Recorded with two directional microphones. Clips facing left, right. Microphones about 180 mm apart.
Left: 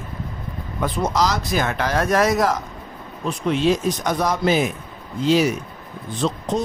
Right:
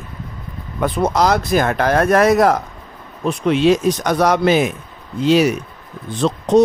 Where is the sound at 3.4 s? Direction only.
75° right (ahead or behind).